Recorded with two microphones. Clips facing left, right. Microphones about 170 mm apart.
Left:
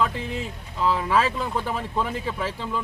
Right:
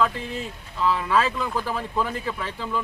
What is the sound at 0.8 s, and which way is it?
Speech, 25° left (ahead or behind).